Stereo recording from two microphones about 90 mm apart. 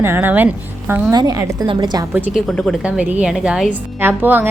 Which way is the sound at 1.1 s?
50° right (ahead or behind).